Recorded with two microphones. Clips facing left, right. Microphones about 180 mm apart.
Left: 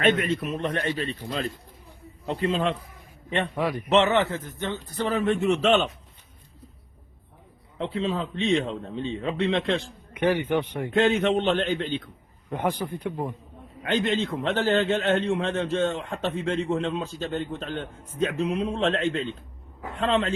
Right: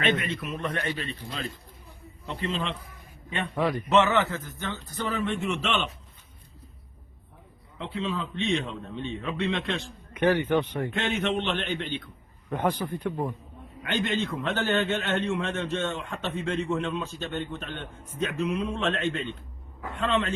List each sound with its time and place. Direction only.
0.0 s a man's voice: 45° left (ahead or behind)
3.2 s a man's voice: 35° left (ahead or behind)
3.5 s a man's voice: 10° left (ahead or behind)
3.9 s a man's voice: 25° left (ahead or behind)
5.0 s a man's voice: 40° left (ahead or behind)
7.8 s a man's voice: 40° left (ahead or behind)
10.2 s a man's voice: 10° left (ahead or behind)
11.2 s a man's voice: 40° left (ahead or behind)
12.5 s a man's voice: 10° left (ahead or behind)
13.9 s a man's voice: 25° left (ahead or behind)